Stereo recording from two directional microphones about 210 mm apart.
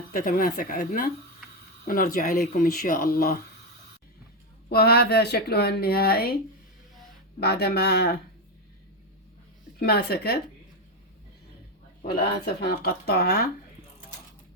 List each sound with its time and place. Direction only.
0.1 s speech: 40° left (ahead or behind)
4.7 s speech: 50° left (ahead or behind)
7.3 s speech: 50° left (ahead or behind)
9.8 s speech: 50° left (ahead or behind)
12.2 s speech: 50° left (ahead or behind)